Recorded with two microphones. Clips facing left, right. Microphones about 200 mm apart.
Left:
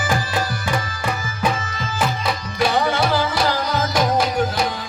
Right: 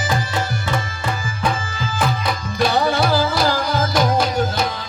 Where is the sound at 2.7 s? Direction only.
30° right (ahead or behind).